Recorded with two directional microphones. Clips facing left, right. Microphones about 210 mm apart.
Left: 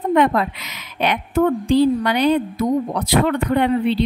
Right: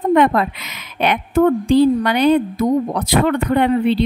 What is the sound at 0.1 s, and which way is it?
Speech, 50° right (ahead or behind).